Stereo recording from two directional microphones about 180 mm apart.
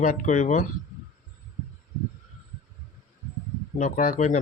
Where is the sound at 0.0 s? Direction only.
45° left (ahead or behind).